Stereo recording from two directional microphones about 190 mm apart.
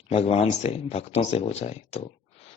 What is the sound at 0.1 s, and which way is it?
Speech, 30° left (ahead or behind).